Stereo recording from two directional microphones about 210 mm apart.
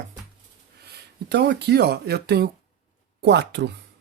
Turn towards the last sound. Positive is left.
turn(degrees=-55)  # may be behind; listen again after turning